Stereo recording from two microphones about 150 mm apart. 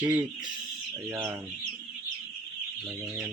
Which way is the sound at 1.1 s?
15° right (ahead or behind).